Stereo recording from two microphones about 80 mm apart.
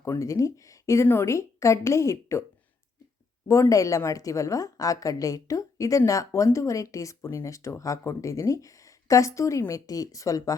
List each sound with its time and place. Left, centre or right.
0.2 s speech: left
3.5 s a woman's voice: left